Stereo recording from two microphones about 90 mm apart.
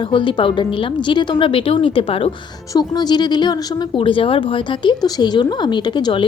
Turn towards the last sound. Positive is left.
turn(degrees=55)  # may be behind; listen again after turning